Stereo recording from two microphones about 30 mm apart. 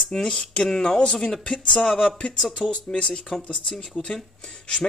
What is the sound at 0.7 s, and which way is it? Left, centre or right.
Speech, centre.